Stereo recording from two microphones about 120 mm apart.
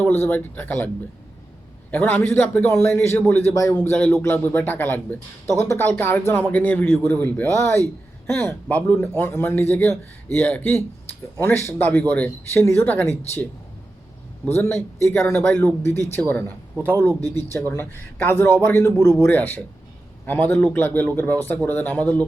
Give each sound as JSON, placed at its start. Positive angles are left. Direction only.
{"t": 0.0, "sound": "a man's voice", "side_deg": 15}
{"t": 1.9, "sound": "a man's voice", "side_deg": 10}